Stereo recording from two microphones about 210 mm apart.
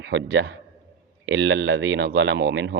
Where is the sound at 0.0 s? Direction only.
60° right (ahead or behind).